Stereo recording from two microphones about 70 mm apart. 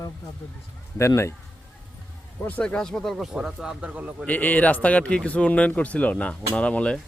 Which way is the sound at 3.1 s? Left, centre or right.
Centre.